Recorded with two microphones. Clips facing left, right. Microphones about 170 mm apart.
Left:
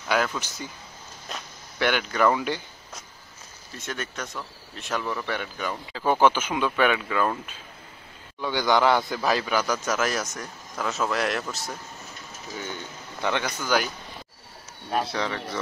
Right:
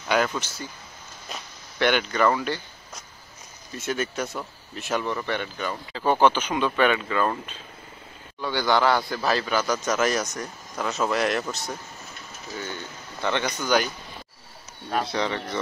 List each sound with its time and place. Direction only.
0.1 s speech: centre (ahead or behind)
3.7 s speech: 5° right (ahead or behind)
8.4 s a man's voice: 15° left (ahead or behind); by 11.4 s centre (ahead or behind)
13.2 s speech: 5° left (ahead or behind)
14.9 s speech: 5° left (ahead or behind)